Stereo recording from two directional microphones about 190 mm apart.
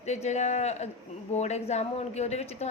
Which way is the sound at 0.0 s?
35° left (ahead or behind).